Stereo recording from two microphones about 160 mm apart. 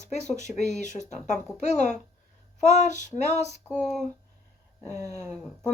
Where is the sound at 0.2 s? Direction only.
45° left (ahead or behind).